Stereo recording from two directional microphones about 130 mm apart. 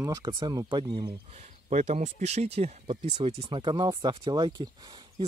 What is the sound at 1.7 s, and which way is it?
Speech, 65° right (ahead or behind).